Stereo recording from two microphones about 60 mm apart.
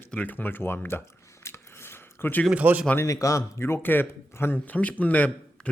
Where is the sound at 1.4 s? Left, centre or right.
Left.